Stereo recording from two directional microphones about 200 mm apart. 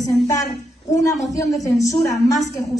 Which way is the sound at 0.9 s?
15° left (ahead or behind).